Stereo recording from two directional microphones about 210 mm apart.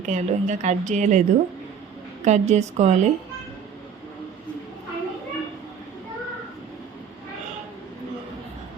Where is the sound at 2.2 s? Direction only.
35° right (ahead or behind).